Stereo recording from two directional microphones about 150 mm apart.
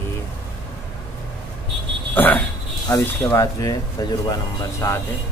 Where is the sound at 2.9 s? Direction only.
20° left (ahead or behind).